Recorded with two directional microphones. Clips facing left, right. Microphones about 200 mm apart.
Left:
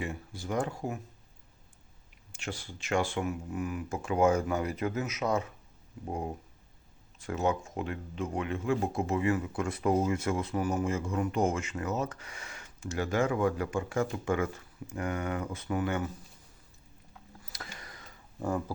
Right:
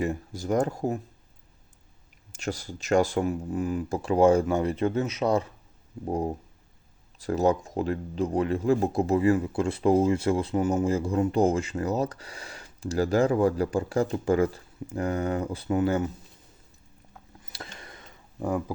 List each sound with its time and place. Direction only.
0.0 s speech: 40° right (ahead or behind)
2.3 s speech: 40° right (ahead or behind)
17.4 s a sound: 25° right (ahead or behind)